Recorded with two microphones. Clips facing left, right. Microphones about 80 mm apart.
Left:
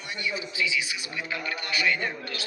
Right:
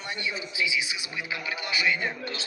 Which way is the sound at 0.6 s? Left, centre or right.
Centre.